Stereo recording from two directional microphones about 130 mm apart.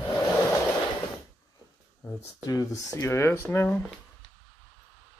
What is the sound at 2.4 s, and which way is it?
Speech, 25° left (ahead or behind).